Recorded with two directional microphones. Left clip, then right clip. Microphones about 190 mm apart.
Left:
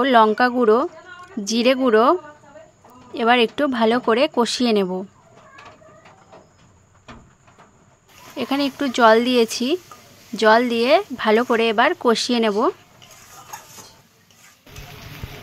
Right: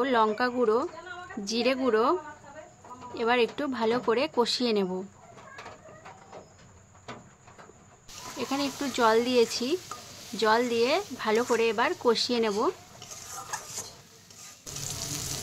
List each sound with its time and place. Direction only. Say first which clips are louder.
0.0 s speech: left 10 dB; 40° left (ahead or behind)
8.4 s speech: left 9 dB; 40° left (ahead or behind)